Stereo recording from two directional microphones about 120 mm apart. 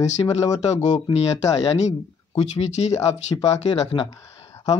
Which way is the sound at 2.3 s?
60° left (ahead or behind).